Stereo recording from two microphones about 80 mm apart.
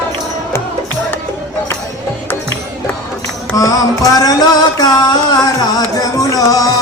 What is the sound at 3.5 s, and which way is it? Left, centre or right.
Music, left.